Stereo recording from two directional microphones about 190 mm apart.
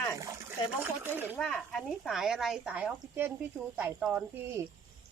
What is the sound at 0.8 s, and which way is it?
Speech, 10° right (ahead or behind).